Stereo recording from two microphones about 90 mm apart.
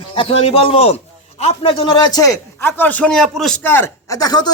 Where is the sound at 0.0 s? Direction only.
85° left; by 2.4 s 45° left (ahead or behind).